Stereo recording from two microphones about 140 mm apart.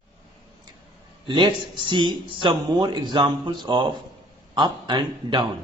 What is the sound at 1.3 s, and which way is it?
Speech, 35° right (ahead or behind).